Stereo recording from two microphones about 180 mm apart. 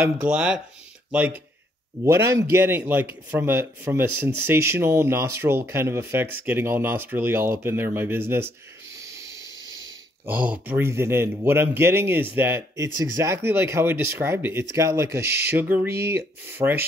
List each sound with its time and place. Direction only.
0.0 s speech: 5° right (ahead or behind)
8.9 s hiss: 15° right (ahead or behind)
10.2 s speech: 10° right (ahead or behind)